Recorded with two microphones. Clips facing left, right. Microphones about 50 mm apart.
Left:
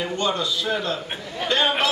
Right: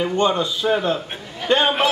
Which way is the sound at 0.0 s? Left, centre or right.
Right.